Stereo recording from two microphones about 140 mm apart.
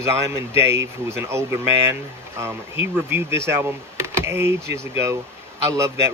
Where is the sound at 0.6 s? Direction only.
20° right (ahead or behind).